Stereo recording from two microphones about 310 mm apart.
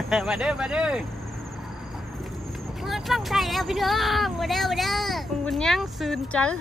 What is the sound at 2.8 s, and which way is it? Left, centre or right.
Speech, centre.